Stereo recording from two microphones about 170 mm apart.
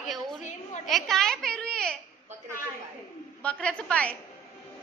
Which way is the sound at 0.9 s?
Centre (ahead or behind).